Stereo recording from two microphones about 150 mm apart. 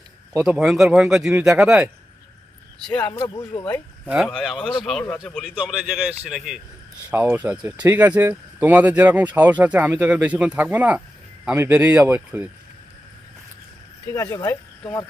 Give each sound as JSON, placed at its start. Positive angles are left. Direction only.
{"t": 0.3, "sound": "speech", "side_deg": -5}
{"t": 2.8, "sound": "speech", "side_deg": 10}
{"t": 3.1, "sound": "speech", "side_deg": 30}
{"t": 4.1, "sound": "speech", "side_deg": 0}
{"t": 14.1, "sound": "speech", "side_deg": 20}